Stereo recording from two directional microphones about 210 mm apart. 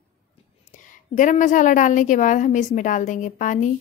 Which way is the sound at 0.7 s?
40° left (ahead or behind).